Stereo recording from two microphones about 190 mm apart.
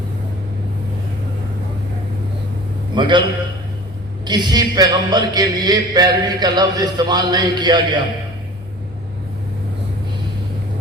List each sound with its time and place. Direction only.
2.9 s a man's voice: 25° right (ahead or behind)
4.3 s a man's voice: 20° right (ahead or behind)